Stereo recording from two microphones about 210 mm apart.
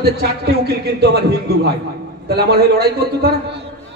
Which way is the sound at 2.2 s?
50° right (ahead or behind).